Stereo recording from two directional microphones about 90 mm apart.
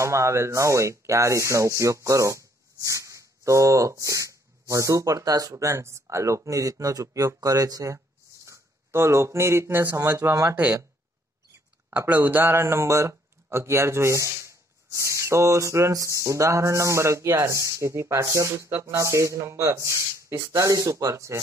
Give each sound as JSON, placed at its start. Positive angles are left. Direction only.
{"t": 0.0, "sound": "speech", "side_deg": -30}
{"t": 12.0, "sound": "speech", "side_deg": -20}